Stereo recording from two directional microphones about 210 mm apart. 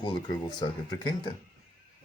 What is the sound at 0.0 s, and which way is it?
Speech, 20° left (ahead or behind).